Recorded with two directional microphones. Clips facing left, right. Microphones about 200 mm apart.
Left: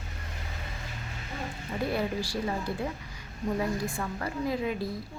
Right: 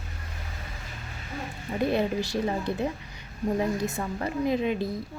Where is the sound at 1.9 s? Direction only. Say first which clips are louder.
Right 4 dB; 20° right (ahead or behind).